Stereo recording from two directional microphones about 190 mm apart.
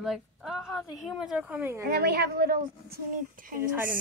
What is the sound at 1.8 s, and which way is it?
A woman's voice, 55° right (ahead or behind).